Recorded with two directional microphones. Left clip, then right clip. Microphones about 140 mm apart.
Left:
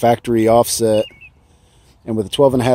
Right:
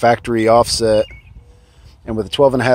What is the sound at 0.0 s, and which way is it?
Speech, 40° left (ahead or behind).